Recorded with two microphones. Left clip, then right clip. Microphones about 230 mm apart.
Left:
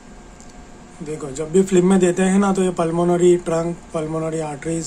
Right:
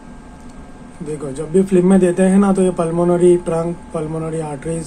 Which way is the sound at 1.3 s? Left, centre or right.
Centre.